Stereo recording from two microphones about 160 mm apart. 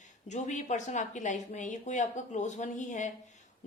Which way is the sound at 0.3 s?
50° left (ahead or behind).